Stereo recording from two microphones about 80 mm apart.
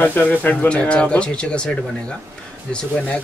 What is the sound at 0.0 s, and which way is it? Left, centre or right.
Speech, left.